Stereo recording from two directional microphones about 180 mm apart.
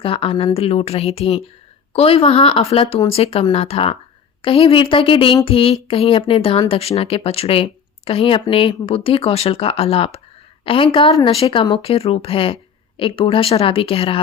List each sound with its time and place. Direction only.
0.0 s speech: 30° left (ahead or behind)